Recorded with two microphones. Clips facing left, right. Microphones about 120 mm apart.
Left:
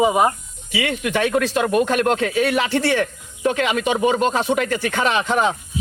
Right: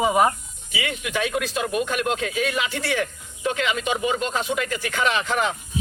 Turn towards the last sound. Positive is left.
turn(degrees=35)  # may be behind; listen again after turning